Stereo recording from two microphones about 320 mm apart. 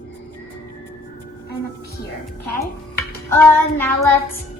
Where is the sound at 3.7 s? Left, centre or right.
Centre.